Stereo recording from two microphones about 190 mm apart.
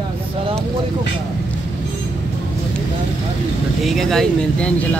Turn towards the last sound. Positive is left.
turn(degrees=5)  # may be behind; listen again after turning